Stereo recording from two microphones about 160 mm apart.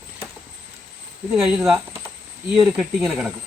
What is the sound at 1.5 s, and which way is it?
Speech, 5° right (ahead or behind).